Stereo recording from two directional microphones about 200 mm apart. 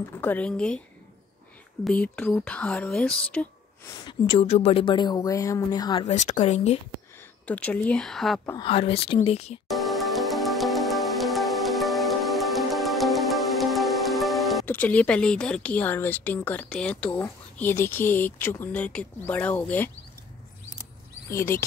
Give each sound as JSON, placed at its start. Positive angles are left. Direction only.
{"t": 0.2, "sound": "speech", "side_deg": 10}
{"t": 1.9, "sound": "speech", "side_deg": 5}
{"t": 4.0, "sound": "a woman's voice", "side_deg": 25}
{"t": 6.0, "sound": "speech", "side_deg": 35}
{"t": 7.4, "sound": "speech", "side_deg": 5}
{"t": 8.5, "sound": "a woman's voice", "side_deg": 25}
{"t": 9.7, "sound": "music", "side_deg": 0}
{"t": 21.3, "sound": "speech", "side_deg": 15}